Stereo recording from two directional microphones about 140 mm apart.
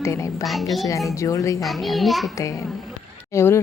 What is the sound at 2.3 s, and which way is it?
Speech, 20° left (ahead or behind).